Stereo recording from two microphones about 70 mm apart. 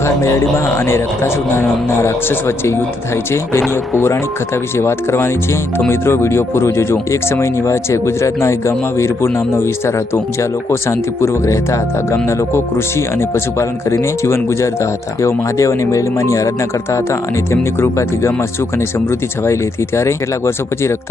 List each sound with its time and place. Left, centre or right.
0.0 s speech: left
3.9 s speech: left
19.5 s speech: left